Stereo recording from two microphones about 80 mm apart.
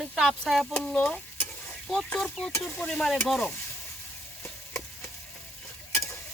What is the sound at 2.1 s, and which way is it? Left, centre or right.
Speech, centre.